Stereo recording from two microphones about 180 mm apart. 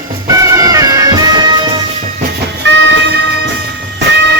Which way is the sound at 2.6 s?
90° right.